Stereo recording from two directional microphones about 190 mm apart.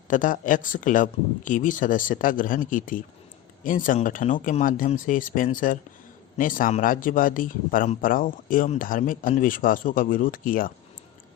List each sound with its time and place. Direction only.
0.1 s a man's voice: 45° left (ahead or behind)